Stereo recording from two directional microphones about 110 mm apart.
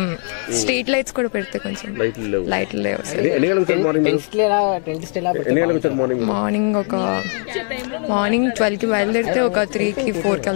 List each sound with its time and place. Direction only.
0.7 s speech: 10° left (ahead or behind)
2.5 s speech: 15° left (ahead or behind)